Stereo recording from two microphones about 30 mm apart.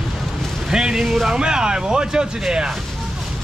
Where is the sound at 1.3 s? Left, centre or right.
Right.